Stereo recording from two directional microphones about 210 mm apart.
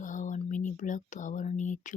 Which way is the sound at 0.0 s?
40° left (ahead or behind).